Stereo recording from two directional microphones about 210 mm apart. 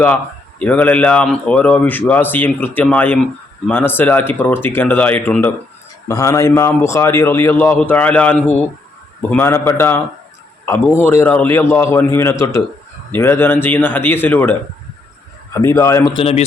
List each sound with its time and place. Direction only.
0.6 s speech: 5° left (ahead or behind)
15.5 s speech: 15° left (ahead or behind)
16.1 s speech: 30° left (ahead or behind)